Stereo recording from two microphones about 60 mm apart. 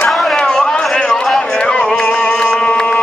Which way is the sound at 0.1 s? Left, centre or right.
Centre.